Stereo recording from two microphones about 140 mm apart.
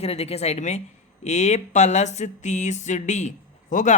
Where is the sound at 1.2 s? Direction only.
55° left (ahead or behind).